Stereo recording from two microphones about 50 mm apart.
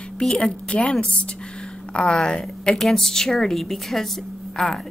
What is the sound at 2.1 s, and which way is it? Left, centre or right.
A woman's voice, centre.